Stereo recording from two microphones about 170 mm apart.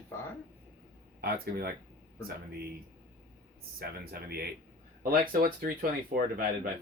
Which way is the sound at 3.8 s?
65° right (ahead or behind).